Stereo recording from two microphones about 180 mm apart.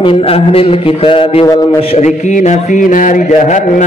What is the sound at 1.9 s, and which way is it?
Mantra, 40° left (ahead or behind).